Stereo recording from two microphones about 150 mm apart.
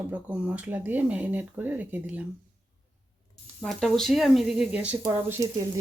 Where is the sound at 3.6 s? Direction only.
Centre (ahead or behind).